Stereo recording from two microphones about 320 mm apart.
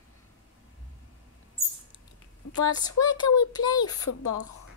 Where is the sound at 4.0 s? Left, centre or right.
Left.